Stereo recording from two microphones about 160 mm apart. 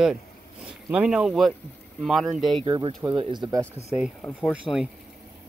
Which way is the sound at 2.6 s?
25° right (ahead or behind).